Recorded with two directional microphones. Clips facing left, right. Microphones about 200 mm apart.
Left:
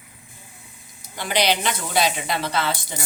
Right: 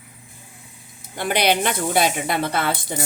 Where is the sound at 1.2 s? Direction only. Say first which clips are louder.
Right 2 dB; 55° right (ahead or behind).